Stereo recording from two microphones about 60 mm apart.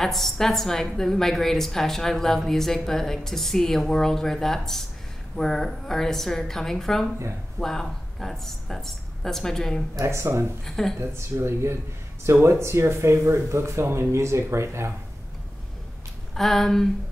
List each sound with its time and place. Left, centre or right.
0.0 s a woman's voice: centre
9.9 s speech: right
10.6 s a woman's voice: centre
11.0 s speech: right
16.3 s a woman's voice: centre